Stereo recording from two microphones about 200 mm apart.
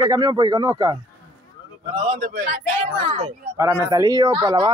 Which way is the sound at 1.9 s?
30° right (ahead or behind).